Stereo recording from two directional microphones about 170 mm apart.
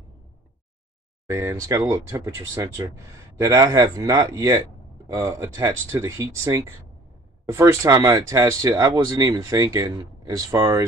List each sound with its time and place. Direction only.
1.3 s speech: 15° right (ahead or behind)